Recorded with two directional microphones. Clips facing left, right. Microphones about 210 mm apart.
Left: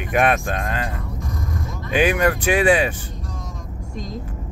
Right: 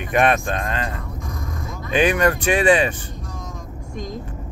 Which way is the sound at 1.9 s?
5° left (ahead or behind).